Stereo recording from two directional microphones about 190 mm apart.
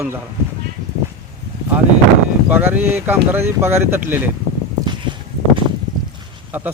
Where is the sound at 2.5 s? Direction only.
10° right (ahead or behind).